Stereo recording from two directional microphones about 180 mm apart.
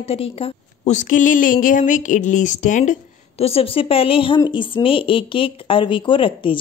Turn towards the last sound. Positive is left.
turn(degrees=30)  # may be behind; listen again after turning